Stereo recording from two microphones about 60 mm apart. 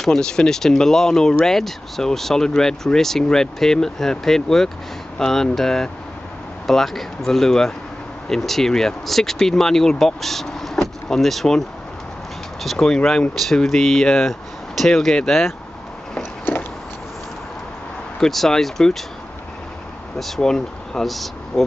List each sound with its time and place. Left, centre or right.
0.0 s speech: centre
12.6 s speech: centre
16.2 s a sound: left
18.2 s speech: centre
20.2 s speech: centre